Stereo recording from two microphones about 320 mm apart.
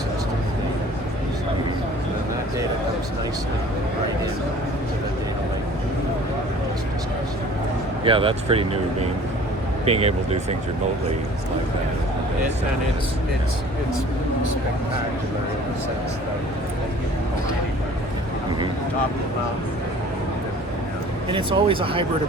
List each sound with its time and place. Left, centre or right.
8.0 s speech: centre
9.8 s speech: centre
21.2 s speech: centre